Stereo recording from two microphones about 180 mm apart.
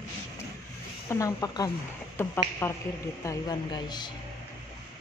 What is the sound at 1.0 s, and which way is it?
A man's voice, 20° left (ahead or behind).